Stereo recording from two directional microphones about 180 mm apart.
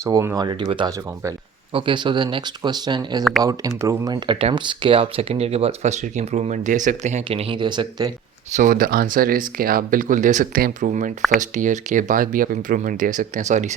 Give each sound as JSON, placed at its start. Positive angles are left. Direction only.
{"t": 0.0, "sound": "speech", "side_deg": -15}
{"t": 8.5, "sound": "speech", "side_deg": -50}